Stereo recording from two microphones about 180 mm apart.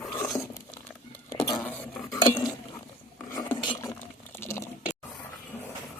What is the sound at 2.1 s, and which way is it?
Cutlery, 25° left (ahead or behind).